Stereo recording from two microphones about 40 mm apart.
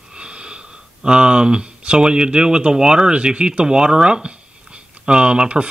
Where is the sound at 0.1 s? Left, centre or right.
Right.